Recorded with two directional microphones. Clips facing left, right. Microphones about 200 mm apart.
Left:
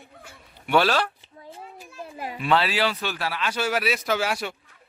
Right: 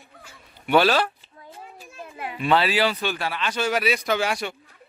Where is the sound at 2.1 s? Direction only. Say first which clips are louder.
Even; 35° left (ahead or behind).